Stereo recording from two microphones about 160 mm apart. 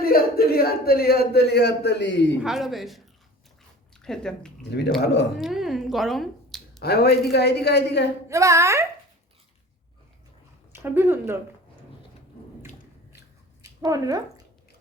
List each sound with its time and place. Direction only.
0.0 s a man's voice: 70° left (ahead or behind); by 2.4 s 90° left
2.4 s speech: centre (ahead or behind)
4.0 s speech: 5° left (ahead or behind)
6.8 s a man's voice: 90° left
8.3 s a woman's voice: 20° right (ahead or behind)
10.7 s speech: 15° right (ahead or behind)
13.6 s a sound: 20° right (ahead or behind)